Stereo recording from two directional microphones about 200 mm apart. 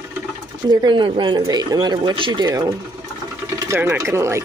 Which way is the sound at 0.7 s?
25° right (ahead or behind).